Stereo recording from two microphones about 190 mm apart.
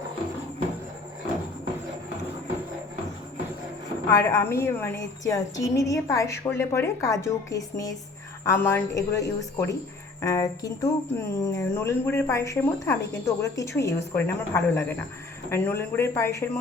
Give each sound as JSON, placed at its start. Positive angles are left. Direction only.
{"t": 4.1, "sound": "speech", "side_deg": 15}